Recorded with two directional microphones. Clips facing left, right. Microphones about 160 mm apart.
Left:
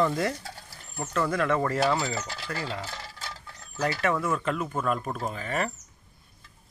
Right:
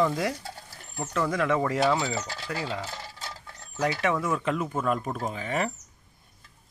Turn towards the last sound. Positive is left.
turn(degrees=-15)  # may be behind; listen again after turning